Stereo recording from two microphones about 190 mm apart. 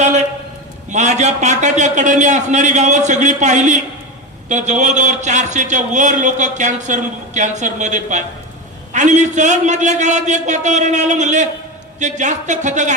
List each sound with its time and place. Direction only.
0.9 s a man's voice: 35° right (ahead or behind)